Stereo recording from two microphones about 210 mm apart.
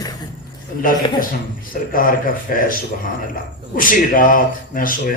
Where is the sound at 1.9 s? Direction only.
40° left (ahead or behind).